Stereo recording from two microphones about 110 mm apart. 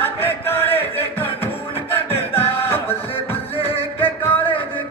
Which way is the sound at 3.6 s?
60° left (ahead or behind).